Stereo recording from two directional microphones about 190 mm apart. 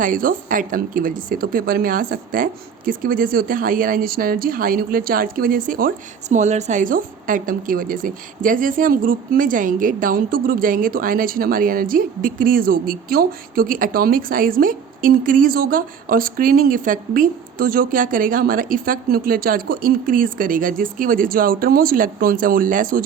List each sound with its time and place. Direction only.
0.0 s speech: 45° right (ahead or behind)